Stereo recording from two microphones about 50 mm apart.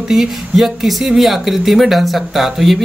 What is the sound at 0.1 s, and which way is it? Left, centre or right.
Speech, centre.